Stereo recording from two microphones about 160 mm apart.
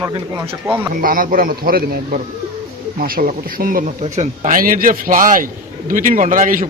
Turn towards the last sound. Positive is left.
turn(degrees=-55)  # may be behind; listen again after turning